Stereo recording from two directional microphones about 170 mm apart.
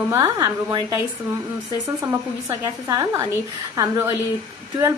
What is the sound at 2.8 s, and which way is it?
Speech, 20° right (ahead or behind).